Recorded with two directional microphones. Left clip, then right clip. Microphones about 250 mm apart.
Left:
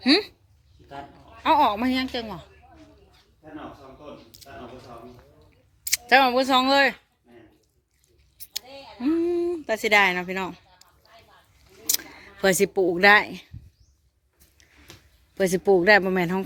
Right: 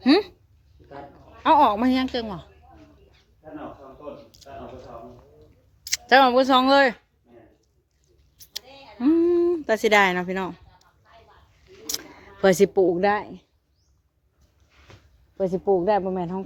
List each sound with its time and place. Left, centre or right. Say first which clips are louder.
0.0 s speech: right 1 dB; centre
1.5 s speech: right 3 dB; centre
4.3 s a sound: even; centre
5.8 s speech: right 2 dB; centre
8.5 s a sound: left 1 dB; centre
11.9 s camera: left 4 dB; centre
13.0 s speech: left 6 dB; centre
15.4 s speech: left 2 dB; left